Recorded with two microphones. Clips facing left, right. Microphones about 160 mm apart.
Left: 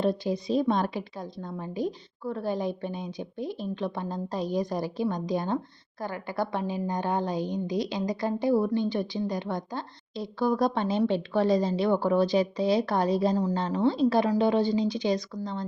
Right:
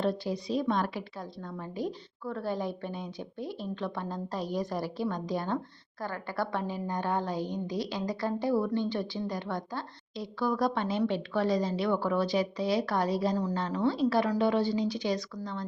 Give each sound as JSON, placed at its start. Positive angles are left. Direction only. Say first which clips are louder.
{"t": 0.0, "sound": "a woman's voice", "louder": "left 4 dB", "side_deg": 20}